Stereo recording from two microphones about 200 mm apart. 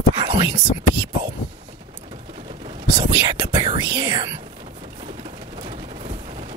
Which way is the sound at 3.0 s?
20° right (ahead or behind).